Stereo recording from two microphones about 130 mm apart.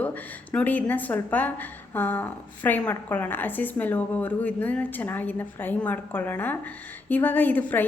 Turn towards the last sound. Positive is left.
turn(degrees=15)  # may be behind; listen again after turning